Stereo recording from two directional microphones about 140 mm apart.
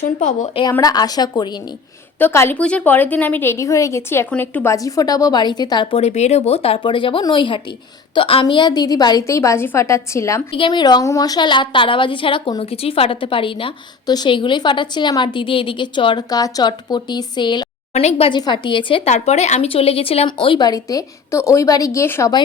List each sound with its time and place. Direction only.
0.8 s a woman's voice: 25° left (ahead or behind)
2.1 s a woman's voice: 15° left (ahead or behind); by 6.0 s 35° left (ahead or behind)
6.0 s a woman's voice: 50° left (ahead or behind); by 10.4 s 20° left (ahead or behind)
10.5 s a woman's voice: 35° left (ahead or behind)
18.0 s speech: 45° left (ahead or behind)
18.3 s a woman's voice: 30° left (ahead or behind)
19.0 s a woman's voice: 50° left (ahead or behind); by 22.3 s 20° left (ahead or behind)